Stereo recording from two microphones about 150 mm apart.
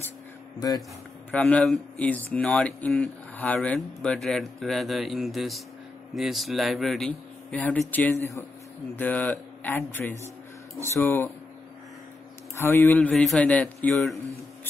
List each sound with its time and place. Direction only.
0.6 s speech: 25° left (ahead or behind)
1.3 s a man's voice: 5° left (ahead or behind)
12.5 s a man's voice: 15° left (ahead or behind)